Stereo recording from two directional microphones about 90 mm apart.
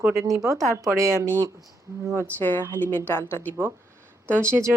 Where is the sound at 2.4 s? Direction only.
20° left (ahead or behind).